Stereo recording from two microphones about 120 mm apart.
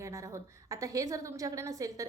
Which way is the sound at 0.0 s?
25° right (ahead or behind).